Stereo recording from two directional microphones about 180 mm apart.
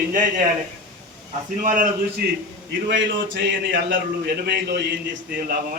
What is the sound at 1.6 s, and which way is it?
Speech, 45° right (ahead or behind).